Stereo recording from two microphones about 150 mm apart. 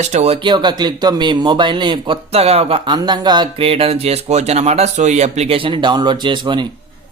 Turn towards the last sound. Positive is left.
turn(degrees=-30)  # may be behind; listen again after turning